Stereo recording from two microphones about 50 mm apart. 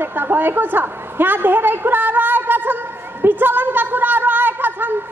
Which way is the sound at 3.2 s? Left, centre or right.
Right.